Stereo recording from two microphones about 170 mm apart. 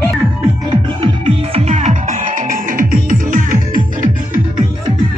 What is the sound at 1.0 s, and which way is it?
Music, 35° right (ahead or behind).